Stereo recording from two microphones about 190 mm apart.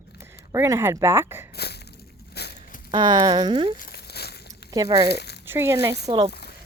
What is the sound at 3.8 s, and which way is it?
Crumpling, 55° left (ahead or behind).